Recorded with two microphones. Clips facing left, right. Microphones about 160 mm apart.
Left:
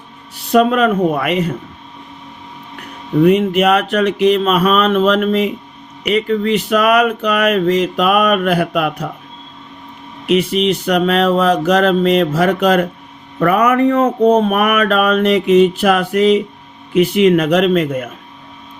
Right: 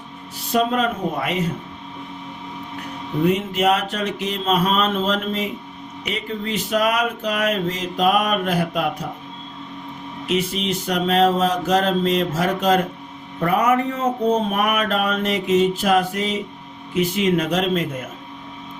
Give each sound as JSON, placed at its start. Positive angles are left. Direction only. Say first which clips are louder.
{"t": 0.5, "sound": "speech", "louder": "left 8 dB", "side_deg": 70}
{"t": 3.2, "sound": "speech", "louder": "left 6 dB", "side_deg": 70}
{"t": 10.2, "sound": "speech", "louder": "left 8 dB", "side_deg": 70}